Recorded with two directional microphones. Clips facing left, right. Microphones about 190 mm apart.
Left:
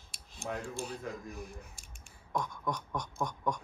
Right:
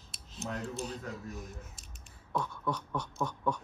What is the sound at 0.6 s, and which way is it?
Speech, 5° right (ahead or behind).